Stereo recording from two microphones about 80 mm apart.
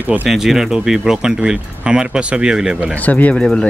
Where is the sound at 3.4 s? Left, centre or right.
Centre.